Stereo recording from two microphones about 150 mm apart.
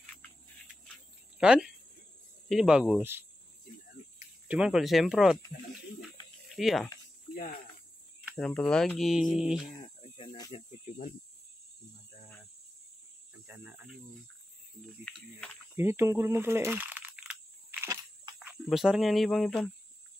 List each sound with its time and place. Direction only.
1.4 s speech: 5° right (ahead or behind)
4.5 s speech: 5° right (ahead or behind)
6.5 s speech: centre (ahead or behind)
8.4 s speech: 5° left (ahead or behind)
9.7 s cricket: 30° left (ahead or behind)
13.3 s cricket: 10° right (ahead or behind)
15.7 s a sound: 15° right (ahead or behind)
17.8 s a sound: 20° right (ahead or behind)
18.7 s speech: centre (ahead or behind)